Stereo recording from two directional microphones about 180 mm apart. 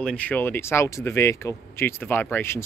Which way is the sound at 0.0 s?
5° left (ahead or behind).